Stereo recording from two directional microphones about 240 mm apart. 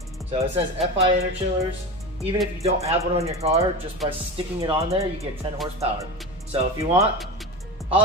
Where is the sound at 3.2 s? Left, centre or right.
Right.